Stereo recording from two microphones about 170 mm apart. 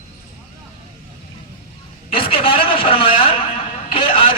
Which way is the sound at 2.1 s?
30° left (ahead or behind).